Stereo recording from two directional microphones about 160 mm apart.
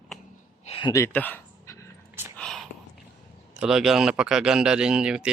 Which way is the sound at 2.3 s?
5° left (ahead or behind).